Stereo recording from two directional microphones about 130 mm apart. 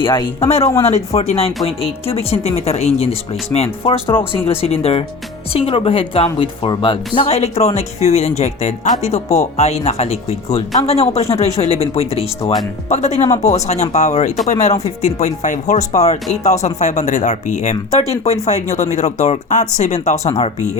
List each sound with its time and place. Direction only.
0.0 s speech: 40° left (ahead or behind)
0.3 s speech: 55° left (ahead or behind); by 7.3 s 40° left (ahead or behind)
7.3 s speech: 55° left (ahead or behind)
12.9 s speech: 60° left (ahead or behind)